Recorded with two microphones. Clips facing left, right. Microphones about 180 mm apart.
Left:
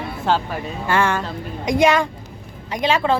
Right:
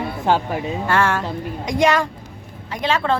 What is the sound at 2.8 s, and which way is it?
Speech, 10° left (ahead or behind).